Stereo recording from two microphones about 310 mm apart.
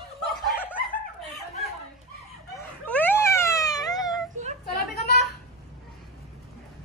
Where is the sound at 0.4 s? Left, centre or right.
Centre.